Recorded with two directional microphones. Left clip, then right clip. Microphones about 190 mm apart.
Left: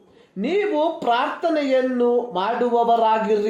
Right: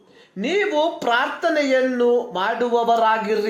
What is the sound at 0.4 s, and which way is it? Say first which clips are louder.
Speech: right 1 dB; 5° right (ahead or behind).